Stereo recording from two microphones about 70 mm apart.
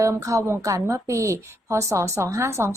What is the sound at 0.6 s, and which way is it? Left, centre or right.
Speech, right.